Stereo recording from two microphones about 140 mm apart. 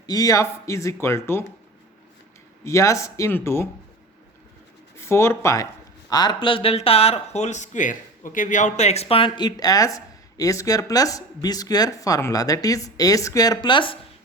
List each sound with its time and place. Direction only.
0.0 s speech: 25° left (ahead or behind)
2.6 s speech: 20° left (ahead or behind)
4.9 s speech: 20° left (ahead or behind); by 14.0 s 35° left (ahead or behind)